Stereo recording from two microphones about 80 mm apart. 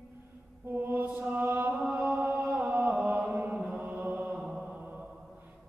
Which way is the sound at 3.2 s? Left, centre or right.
Right.